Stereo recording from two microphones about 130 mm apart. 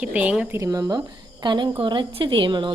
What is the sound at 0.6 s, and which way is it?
A woman's voice, 30° right (ahead or behind).